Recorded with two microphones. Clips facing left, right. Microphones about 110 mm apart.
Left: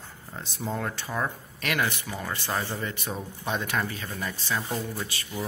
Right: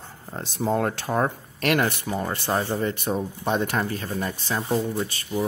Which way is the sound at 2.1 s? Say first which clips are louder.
Right 7 dB; 35° right (ahead or behind).